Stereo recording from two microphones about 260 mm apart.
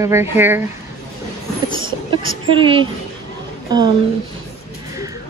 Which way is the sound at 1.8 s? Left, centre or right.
Right.